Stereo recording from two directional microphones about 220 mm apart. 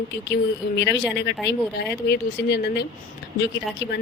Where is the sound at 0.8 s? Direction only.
55° left (ahead or behind).